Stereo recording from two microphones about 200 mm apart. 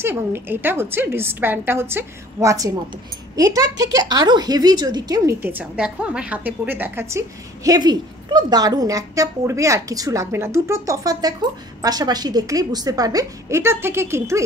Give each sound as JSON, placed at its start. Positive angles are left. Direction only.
{"t": 0.0, "sound": "a woman's voice", "side_deg": -10}